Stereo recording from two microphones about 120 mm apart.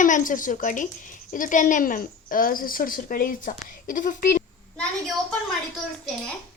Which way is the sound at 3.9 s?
90° left.